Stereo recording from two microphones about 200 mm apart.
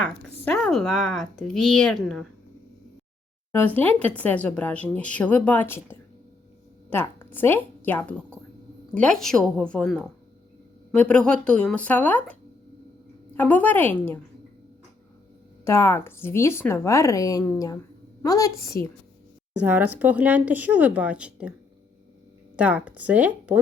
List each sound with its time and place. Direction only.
0.4 s speech: 5° left (ahead or behind)
3.5 s a woman's voice: 10° left (ahead or behind)
15.6 s speech: 15° left (ahead or behind)
19.6 s speech: 10° right (ahead or behind)
22.5 s speech: 5° right (ahead or behind)